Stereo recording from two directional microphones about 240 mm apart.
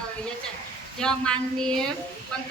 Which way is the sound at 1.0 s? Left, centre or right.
Centre.